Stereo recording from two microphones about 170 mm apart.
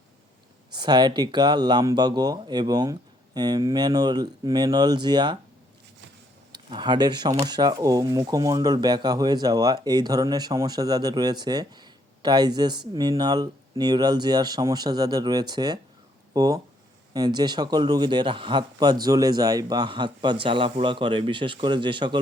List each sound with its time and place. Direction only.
0.8 s speech: 25° right (ahead or behind)
6.5 s speech: 25° right (ahead or behind)